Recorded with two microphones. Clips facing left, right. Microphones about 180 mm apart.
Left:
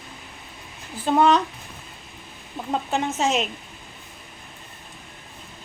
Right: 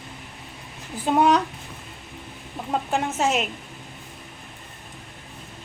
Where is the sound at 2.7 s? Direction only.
10° right (ahead or behind).